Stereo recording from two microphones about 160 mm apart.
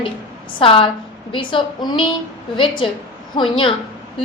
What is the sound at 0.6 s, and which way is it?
A woman's voice, 35° left (ahead or behind).